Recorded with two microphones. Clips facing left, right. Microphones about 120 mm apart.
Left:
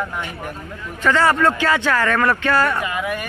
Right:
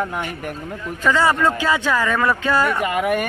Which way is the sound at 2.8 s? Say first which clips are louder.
Right 5 dB; 60° right (ahead or behind).